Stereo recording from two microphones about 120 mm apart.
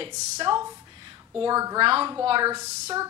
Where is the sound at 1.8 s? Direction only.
45° right (ahead or behind).